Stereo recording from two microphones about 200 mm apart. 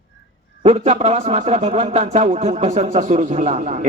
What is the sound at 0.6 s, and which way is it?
Speech, 35° right (ahead or behind).